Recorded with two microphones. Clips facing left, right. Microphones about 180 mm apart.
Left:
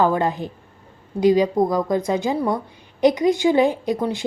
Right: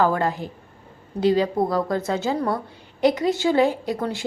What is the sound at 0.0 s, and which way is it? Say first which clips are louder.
A woman's voice: left 2 dB; 20° left (ahead or behind).